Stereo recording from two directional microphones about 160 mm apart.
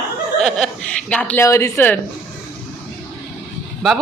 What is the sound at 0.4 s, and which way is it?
A woman's voice, centre (ahead or behind).